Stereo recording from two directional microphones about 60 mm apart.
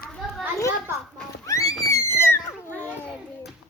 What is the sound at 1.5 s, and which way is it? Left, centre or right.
Music, left.